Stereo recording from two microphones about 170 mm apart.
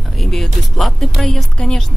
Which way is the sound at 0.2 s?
Centre (ahead or behind).